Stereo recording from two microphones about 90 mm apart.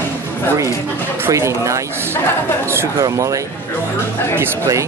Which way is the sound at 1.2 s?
30° right (ahead or behind).